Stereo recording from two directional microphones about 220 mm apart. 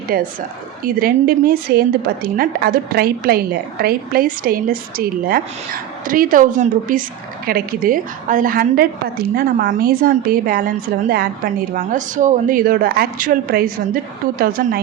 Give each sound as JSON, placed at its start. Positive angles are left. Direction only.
{"t": 0.1, "sound": "a woman's voice", "side_deg": -40}